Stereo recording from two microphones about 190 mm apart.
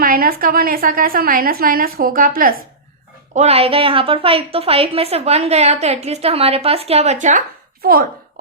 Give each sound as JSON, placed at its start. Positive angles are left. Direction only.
{"t": 0.0, "sound": "a woman's voice", "side_deg": -50}
{"t": 3.3, "sound": "a woman's voice", "side_deg": -35}
{"t": 7.8, "sound": "a child's voice", "side_deg": -50}